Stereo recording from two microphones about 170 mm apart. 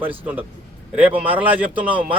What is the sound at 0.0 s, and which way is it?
A man's voice, 10° right (ahead or behind).